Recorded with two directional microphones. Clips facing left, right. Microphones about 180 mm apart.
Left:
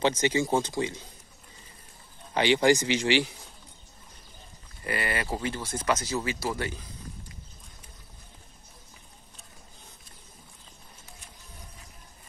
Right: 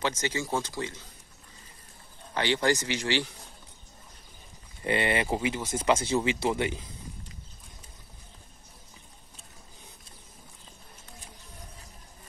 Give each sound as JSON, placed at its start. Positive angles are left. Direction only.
{"t": 0.0, "sound": "speech", "side_deg": 20}
{"t": 2.3, "sound": "speech", "side_deg": 15}
{"t": 4.8, "sound": "speech", "side_deg": -25}